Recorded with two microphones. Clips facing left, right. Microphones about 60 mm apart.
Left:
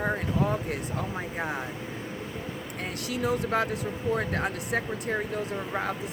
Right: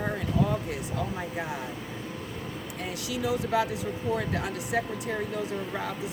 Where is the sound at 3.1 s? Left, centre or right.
Left.